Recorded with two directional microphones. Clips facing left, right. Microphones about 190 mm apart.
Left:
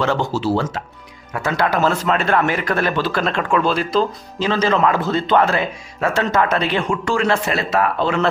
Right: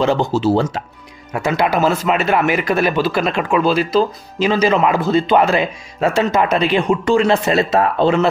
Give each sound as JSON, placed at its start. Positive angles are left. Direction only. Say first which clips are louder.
{"t": 0.0, "sound": "speech", "louder": "right 4 dB", "side_deg": -15}